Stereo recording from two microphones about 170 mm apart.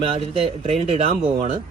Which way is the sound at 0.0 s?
30° right (ahead or behind).